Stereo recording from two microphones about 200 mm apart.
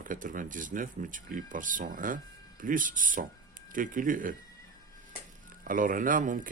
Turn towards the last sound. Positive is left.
turn(degrees=-40)  # may be behind; listen again after turning